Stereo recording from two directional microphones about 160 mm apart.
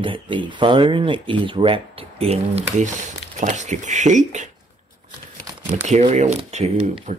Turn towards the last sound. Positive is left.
turn(degrees=-45)  # may be behind; listen again after turning